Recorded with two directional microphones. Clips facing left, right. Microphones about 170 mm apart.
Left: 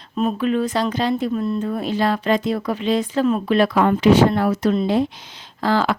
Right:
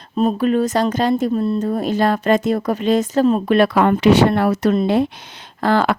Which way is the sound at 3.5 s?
65° right (ahead or behind).